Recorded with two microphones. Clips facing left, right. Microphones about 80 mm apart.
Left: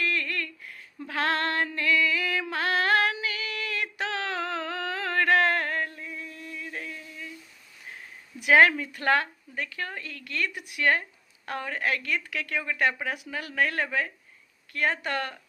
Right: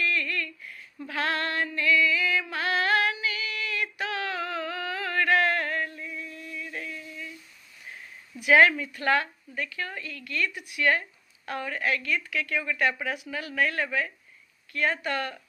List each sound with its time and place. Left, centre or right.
0.2 s a sound: left
1.0 s female singing: left
8.6 s a woman's voice: left
12.6 s speech: left
13.6 s speech: left